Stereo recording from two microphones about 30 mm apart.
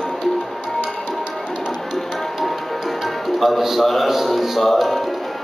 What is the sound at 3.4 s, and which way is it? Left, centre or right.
Speech, centre.